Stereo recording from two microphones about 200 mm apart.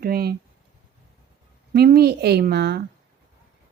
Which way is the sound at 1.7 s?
50° right (ahead or behind).